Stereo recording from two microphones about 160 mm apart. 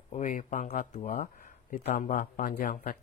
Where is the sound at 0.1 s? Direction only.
55° left (ahead or behind).